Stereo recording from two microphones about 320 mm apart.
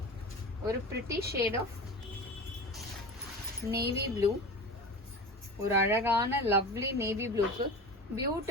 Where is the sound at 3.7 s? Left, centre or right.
Right.